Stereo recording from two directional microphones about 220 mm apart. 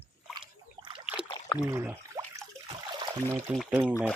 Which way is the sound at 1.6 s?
10° right (ahead or behind).